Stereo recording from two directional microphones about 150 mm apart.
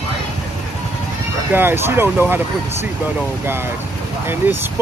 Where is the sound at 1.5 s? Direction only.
15° right (ahead or behind).